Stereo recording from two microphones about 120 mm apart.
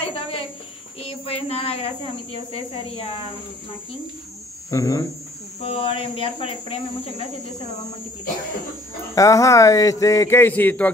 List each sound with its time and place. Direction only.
0.1 s a sound: 45° left (ahead or behind)
1.0 s speech: 55° left (ahead or behind)
4.6 s a man's voice: 25° left (ahead or behind)
5.6 s speech: 50° left (ahead or behind)
9.1 s a man's voice: 25° left (ahead or behind)